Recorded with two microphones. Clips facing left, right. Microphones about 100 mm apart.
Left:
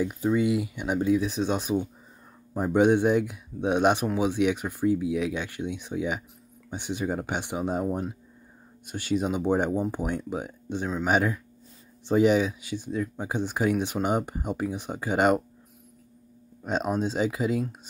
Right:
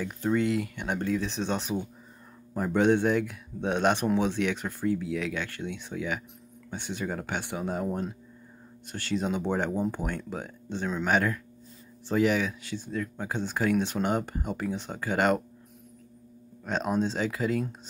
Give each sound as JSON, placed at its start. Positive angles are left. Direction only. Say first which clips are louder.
{"t": 0.0, "sound": "speech", "louder": "left 3 dB", "side_deg": 10}
{"t": 16.6, "sound": "speech", "louder": "left 1 dB", "side_deg": 15}